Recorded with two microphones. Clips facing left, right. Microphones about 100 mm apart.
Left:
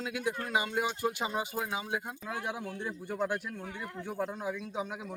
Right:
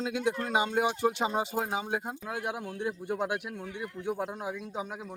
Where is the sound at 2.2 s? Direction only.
5° right (ahead or behind).